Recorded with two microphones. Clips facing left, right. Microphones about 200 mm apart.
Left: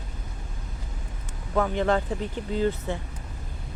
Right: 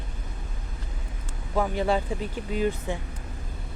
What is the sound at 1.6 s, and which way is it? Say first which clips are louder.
Speech: left 1 dB; 10° right (ahead or behind).